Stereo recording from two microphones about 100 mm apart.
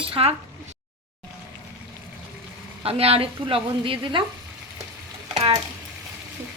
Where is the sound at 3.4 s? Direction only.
60° right (ahead or behind).